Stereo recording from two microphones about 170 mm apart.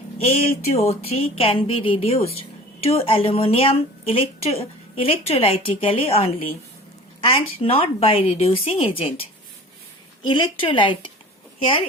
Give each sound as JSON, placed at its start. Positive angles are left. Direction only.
{"t": 0.2, "sound": "a woman's voice", "side_deg": 35}
{"t": 10.2, "sound": "a woman's voice", "side_deg": 30}